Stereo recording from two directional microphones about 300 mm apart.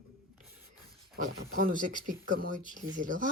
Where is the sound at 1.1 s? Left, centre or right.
Right.